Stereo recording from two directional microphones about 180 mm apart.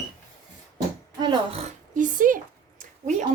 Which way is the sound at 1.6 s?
45° right (ahead or behind).